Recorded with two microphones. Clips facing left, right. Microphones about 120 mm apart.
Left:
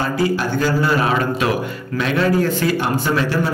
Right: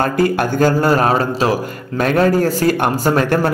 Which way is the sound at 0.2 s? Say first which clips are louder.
Right 4 dB; 45° right (ahead or behind).